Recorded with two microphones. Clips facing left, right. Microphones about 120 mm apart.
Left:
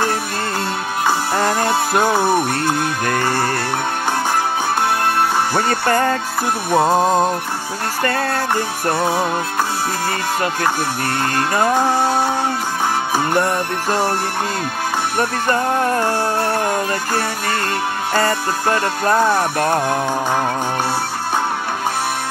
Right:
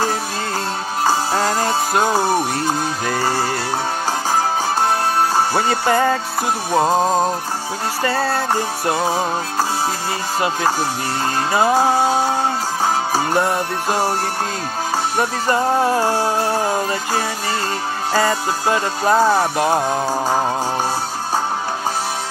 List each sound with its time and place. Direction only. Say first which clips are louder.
2.5 s music: left 1 dB; 60° left (ahead or behind)
3.1 s music: even; 10° right (ahead or behind)
5.5 s music: even; 10° right (ahead or behind)
6.7 s music: left 2 dB; 5° left (ahead or behind)
8.0 s music: even; 5° right (ahead or behind)
8.8 s music: left 1 dB; 15° right (ahead or behind)
11.5 s music: right 2 dB; 10° right (ahead or behind)
13.3 s music: even; 10° right (ahead or behind)
15.1 s music: even; 10° right (ahead or behind)
18.1 s music: right 1 dB; 10° right (ahead or behind)